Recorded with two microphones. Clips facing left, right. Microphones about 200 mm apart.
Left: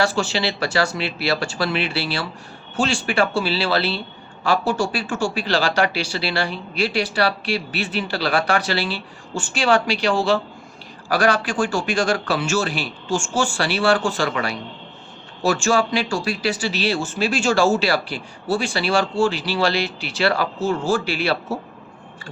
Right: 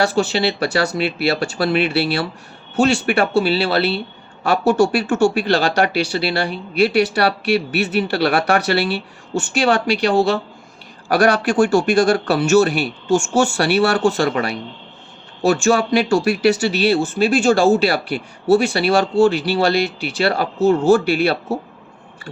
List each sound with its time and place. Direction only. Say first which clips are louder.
0.0 s speech: right 4 dB; 60° right (ahead or behind)
15.6 s speech: right 4 dB; 65° right (ahead or behind)